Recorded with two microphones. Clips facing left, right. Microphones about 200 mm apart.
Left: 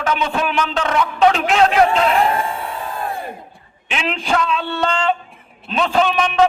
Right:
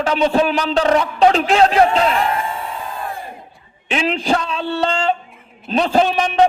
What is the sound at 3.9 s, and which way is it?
A man's voice, 35° right (ahead or behind).